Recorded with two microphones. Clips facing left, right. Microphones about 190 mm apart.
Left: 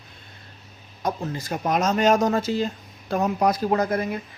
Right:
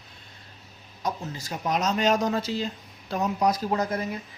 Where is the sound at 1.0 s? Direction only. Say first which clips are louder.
Left 4 dB; 55° left (ahead or behind).